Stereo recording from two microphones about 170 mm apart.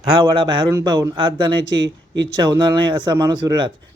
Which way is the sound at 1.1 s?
30° right (ahead or behind).